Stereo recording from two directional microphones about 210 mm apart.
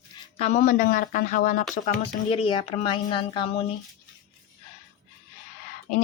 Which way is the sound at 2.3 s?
25° left (ahead or behind).